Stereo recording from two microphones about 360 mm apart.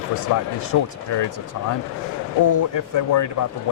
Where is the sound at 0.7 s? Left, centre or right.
Left.